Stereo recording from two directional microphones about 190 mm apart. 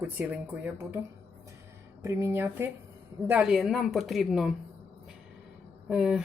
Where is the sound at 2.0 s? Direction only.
15° right (ahead or behind).